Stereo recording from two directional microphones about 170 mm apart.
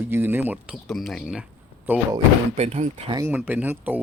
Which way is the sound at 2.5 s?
40° right (ahead or behind).